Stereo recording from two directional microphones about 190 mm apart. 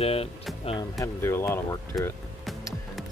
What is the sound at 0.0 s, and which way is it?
Speech, 30° left (ahead or behind).